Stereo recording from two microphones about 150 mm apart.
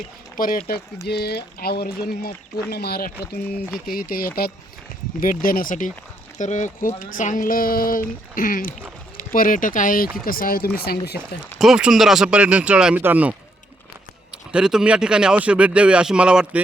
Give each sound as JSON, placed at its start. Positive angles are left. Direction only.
{"t": 0.3, "sound": "speech", "side_deg": 70}
{"t": 1.0, "sound": "speech", "side_deg": 90}
{"t": 3.8, "sound": "speech", "side_deg": 75}
{"t": 5.2, "sound": "speech", "side_deg": 70}
{"t": 10.8, "sound": "speech", "side_deg": 90}
{"t": 11.5, "sound": "speech", "side_deg": 0}
{"t": 14.5, "sound": "speech", "side_deg": -5}